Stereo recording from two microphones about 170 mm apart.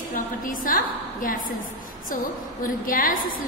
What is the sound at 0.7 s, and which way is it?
Speech, 55° left (ahead or behind).